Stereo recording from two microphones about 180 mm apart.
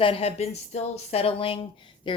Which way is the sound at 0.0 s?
30° left (ahead or behind).